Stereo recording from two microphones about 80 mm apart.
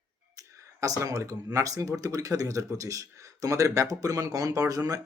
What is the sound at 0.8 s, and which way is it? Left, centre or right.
A man's voice, right.